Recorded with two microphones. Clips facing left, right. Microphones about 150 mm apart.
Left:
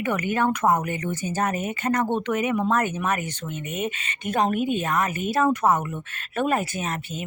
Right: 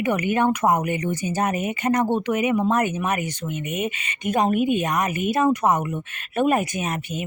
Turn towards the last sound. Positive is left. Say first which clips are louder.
# right 3 dB
turn(degrees=-15)  # may be behind; listen again after turning